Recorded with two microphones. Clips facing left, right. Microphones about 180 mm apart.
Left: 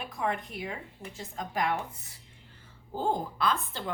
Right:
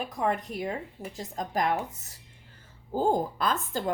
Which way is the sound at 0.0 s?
40° right (ahead or behind).